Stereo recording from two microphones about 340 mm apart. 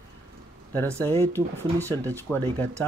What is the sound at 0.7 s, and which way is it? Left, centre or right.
Speech, centre.